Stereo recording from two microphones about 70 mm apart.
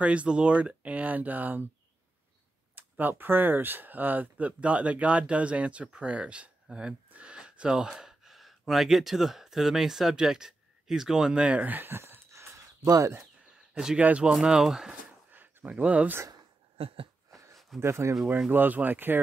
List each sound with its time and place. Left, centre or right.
0.0 s speech: centre
2.7 s speech: right
13.7 s speech: centre
15.3 s speech: right
17.7 s speech: right
18.5 s speech: right